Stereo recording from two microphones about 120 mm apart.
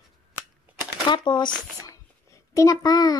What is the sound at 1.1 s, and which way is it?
Speech, 40° left (ahead or behind).